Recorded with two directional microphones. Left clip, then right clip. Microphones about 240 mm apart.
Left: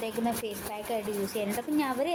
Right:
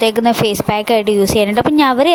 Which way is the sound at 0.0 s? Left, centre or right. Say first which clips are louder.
Right 19 dB; right.